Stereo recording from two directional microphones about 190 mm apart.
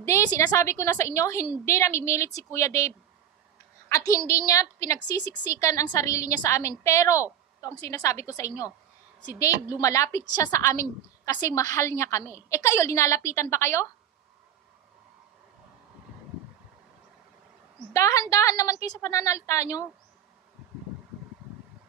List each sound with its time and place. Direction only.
0.0 s a woman's voice: 15° left (ahead or behind)
3.9 s a woman's voice: 15° left (ahead or behind)
17.9 s a woman's voice: 15° left (ahead or behind)